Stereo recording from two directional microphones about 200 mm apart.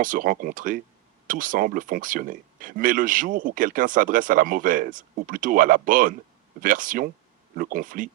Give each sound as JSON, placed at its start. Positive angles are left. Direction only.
{"t": 0.0, "sound": "speech", "side_deg": -45}